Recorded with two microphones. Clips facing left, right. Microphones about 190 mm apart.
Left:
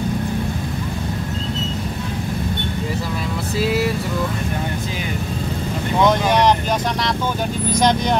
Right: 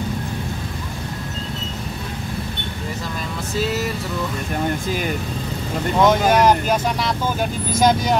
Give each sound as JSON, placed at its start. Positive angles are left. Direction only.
{"t": 3.5, "sound": "vehicle", "side_deg": 10}
{"t": 6.0, "sound": "speech", "side_deg": -5}
{"t": 7.7, "sound": "speech", "side_deg": -5}